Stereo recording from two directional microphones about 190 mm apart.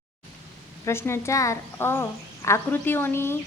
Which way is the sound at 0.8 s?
15° left (ahead or behind).